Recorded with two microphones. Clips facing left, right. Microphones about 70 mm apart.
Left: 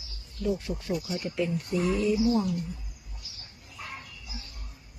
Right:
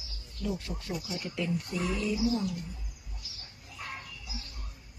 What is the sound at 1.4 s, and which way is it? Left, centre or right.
Speech, left.